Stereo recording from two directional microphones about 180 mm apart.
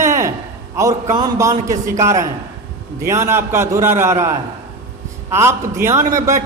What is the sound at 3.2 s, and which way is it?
A man's voice, 15° right (ahead or behind).